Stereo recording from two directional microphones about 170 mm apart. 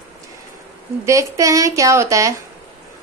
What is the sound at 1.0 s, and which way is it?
A woman's voice, 20° right (ahead or behind).